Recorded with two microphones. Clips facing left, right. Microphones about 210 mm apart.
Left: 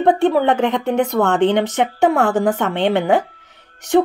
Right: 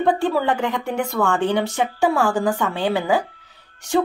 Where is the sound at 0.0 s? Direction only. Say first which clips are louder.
Left 5 dB; 20° left (ahead or behind).